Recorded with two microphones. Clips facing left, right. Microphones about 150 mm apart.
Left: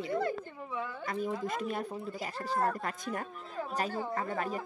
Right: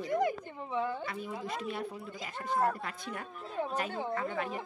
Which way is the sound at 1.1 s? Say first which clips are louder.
Left 4 dB; 45° left (ahead or behind).